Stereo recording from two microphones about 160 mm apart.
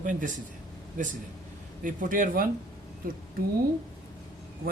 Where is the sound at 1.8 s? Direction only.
55° right (ahead or behind).